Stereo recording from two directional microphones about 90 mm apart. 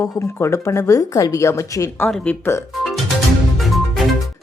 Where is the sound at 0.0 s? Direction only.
30° left (ahead or behind).